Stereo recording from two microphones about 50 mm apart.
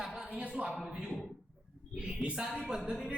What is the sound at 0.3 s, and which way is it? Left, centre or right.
Speech, right.